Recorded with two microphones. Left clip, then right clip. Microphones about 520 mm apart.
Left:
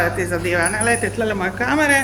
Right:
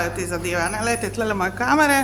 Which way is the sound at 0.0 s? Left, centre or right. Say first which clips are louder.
Left 5 dB; right.